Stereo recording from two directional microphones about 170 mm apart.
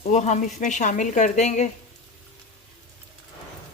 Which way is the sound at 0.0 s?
45° left (ahead or behind).